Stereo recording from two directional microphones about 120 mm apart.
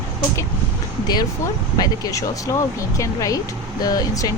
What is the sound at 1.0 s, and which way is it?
Speech, 35° left (ahead or behind).